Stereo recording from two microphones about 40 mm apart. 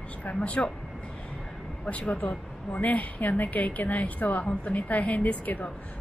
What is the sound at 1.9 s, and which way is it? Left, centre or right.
Speech, left.